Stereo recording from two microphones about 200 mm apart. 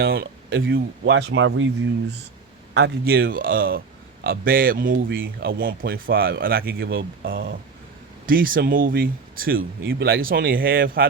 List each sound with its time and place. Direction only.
0.0 s speech: 50° right (ahead or behind)
0.7 s speech: 65° right (ahead or behind)
2.7 s speech: 50° right (ahead or behind)